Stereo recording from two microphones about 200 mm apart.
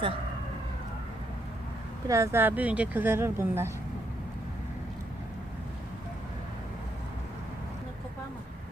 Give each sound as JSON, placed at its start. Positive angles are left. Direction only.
{"t": 2.0, "sound": "speech", "side_deg": -15}